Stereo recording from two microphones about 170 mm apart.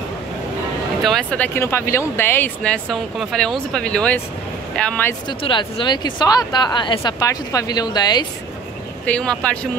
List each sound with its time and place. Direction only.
1.0 s speech: 5° left (ahead or behind)
5.4 s speech: 30° left (ahead or behind)
9.0 s speech: 5° left (ahead or behind)